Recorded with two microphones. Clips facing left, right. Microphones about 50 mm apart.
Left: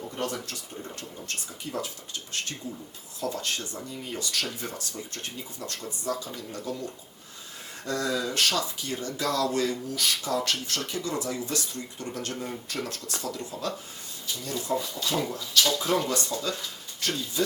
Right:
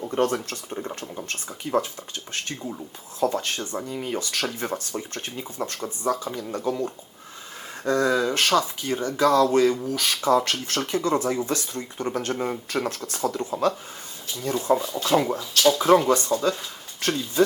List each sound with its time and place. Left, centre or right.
0.1 s speech: right
3.8 s speech: right
4.2 s speech: right
4.9 s speech: right